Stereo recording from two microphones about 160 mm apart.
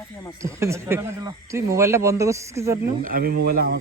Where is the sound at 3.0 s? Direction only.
65° right (ahead or behind).